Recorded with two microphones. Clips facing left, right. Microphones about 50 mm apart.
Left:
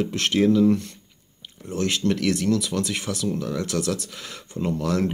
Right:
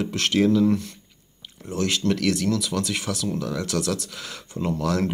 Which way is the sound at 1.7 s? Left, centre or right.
Left.